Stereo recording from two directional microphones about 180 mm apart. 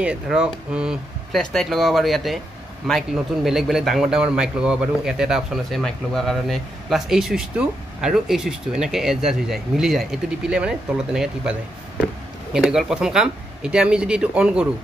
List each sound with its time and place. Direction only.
0.0 s speech: 5° right (ahead or behind)
12.5 s speech: 5° right (ahead or behind)